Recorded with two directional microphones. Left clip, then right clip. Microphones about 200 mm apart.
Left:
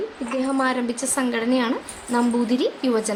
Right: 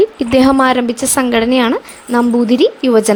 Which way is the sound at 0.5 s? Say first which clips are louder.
Right 11 dB; 40° right (ahead or behind).